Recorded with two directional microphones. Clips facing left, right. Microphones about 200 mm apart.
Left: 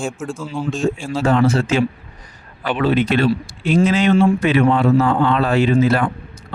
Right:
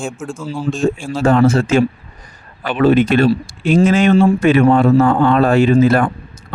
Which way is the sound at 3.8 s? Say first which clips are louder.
Right 3 dB; 50° right (ahead or behind).